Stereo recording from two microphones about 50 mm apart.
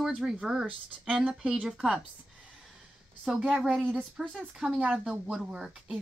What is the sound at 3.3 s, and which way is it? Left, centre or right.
Speech, centre.